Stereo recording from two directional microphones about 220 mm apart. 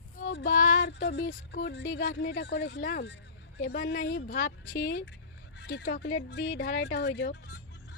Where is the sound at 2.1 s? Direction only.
50° left (ahead or behind).